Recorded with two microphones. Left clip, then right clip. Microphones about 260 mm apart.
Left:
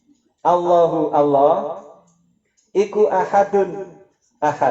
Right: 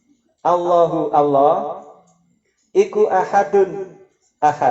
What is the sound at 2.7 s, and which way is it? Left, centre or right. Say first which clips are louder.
Speech: right 1 dB; right.